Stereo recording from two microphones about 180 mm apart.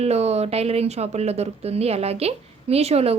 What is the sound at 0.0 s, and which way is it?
A woman's voice, 35° right (ahead or behind).